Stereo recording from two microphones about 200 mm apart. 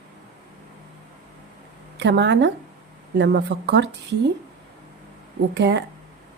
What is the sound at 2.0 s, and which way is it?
A woman's voice, 60° right (ahead or behind).